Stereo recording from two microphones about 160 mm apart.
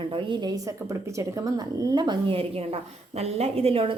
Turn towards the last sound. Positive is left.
turn(degrees=-35)  # may be behind; listen again after turning